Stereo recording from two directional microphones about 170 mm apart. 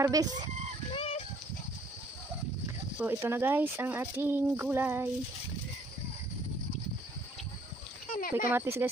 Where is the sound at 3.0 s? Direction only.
15° right (ahead or behind).